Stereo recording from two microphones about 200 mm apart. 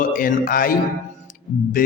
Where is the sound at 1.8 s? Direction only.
45° left (ahead or behind).